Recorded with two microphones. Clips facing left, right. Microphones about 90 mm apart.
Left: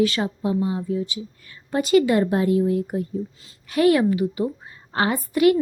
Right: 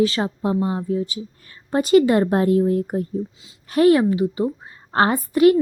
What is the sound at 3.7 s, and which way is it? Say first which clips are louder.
A woman's voice: right 3 dB; 30° right (ahead or behind).